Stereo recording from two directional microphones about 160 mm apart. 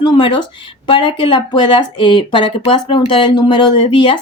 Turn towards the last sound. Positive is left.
turn(degrees=30)  # may be behind; listen again after turning